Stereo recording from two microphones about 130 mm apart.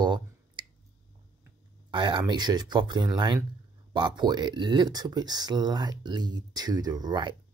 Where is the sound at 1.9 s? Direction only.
35° right (ahead or behind).